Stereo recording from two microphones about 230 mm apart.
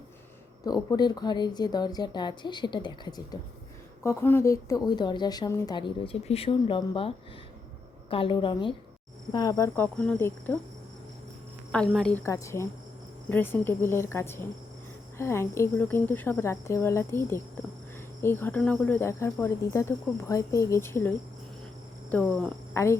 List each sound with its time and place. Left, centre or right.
0.6 s a woman's voice: centre
8.1 s a woman's voice: left
11.7 s speech: centre